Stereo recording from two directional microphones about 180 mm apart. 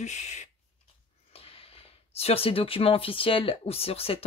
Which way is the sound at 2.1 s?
35° left (ahead or behind).